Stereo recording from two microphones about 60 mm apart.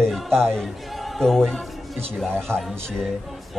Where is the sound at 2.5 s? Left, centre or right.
Right.